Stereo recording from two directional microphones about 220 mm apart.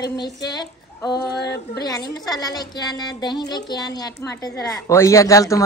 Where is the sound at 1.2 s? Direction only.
50° left (ahead or behind).